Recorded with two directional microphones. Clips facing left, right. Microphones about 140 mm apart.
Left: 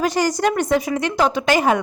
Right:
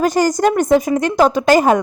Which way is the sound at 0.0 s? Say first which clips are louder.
Right 4 dB; 45° right (ahead or behind).